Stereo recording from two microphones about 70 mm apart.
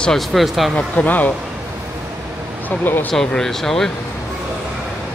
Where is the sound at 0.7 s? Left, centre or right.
Left.